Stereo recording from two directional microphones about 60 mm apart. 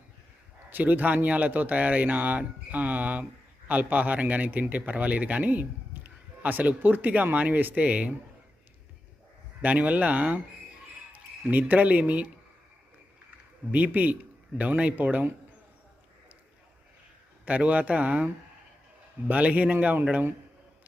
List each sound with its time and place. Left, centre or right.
0.7 s a man's voice: right
9.6 s a man's voice: right
13.7 s a man's voice: right
17.4 s a man's voice: right
19.3 s a man's voice: right